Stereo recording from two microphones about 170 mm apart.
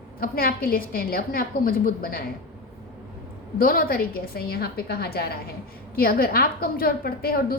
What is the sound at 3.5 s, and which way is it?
A woman's voice, 60° left (ahead or behind).